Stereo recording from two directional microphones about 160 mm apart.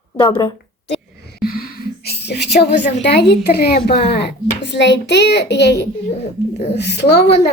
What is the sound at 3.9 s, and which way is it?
A child's voice, 90° left.